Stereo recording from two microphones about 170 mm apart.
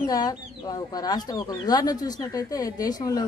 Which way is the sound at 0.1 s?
25° left (ahead or behind).